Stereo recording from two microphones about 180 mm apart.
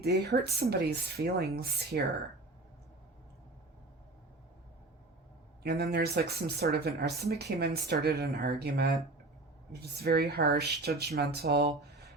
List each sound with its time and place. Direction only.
0.0 s speech: 65° right (ahead or behind)
5.6 s speech: 65° right (ahead or behind)
10.0 s speech: 60° right (ahead or behind)